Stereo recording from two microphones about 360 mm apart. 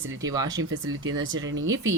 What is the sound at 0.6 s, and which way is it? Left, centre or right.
Speech, right.